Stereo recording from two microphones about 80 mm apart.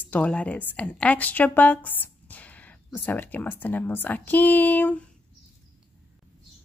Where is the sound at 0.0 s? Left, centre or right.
Centre.